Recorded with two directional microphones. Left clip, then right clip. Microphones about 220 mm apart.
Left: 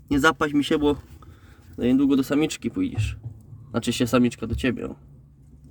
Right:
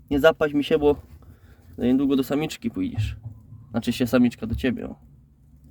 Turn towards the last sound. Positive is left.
turn(degrees=0)  # may be behind; listen again after turning